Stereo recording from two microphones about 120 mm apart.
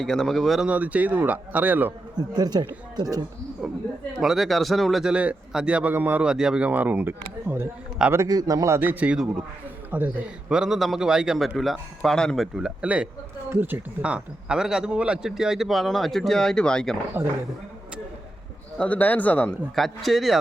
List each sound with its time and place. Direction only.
0.0 s speech: 5° left (ahead or behind)
0.7 s a man's voice: 10° right (ahead or behind)
2.1 s a man's voice: 35° right (ahead or behind)
3.6 s a man's voice: 5° right (ahead or behind)
18.8 s a man's voice: 15° left (ahead or behind)